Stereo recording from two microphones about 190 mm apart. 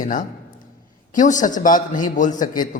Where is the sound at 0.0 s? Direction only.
45° left (ahead or behind).